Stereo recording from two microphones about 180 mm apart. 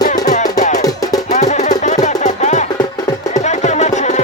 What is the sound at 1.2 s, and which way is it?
Music, 40° left (ahead or behind).